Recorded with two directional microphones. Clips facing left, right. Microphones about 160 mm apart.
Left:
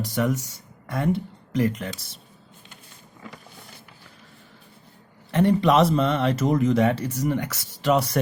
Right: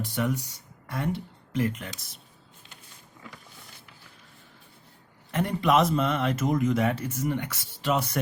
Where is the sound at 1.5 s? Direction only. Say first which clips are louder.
Left 4 dB; 40° left (ahead or behind).